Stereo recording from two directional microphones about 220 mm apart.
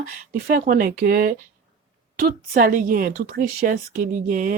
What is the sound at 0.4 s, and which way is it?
A woman's voice, 40° right (ahead or behind).